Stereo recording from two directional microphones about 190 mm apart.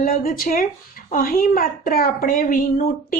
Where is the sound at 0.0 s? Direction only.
50° left (ahead or behind).